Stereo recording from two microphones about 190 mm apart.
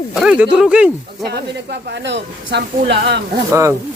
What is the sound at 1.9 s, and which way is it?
Speech, 65° right (ahead or behind).